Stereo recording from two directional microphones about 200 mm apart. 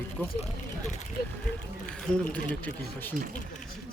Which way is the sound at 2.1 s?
5° left (ahead or behind).